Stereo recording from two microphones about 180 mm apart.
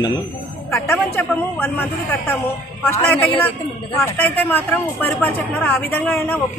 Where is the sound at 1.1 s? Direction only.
10° left (ahead or behind).